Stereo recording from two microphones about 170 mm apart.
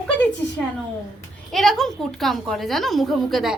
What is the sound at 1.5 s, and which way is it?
A woman's voice, centre (ahead or behind).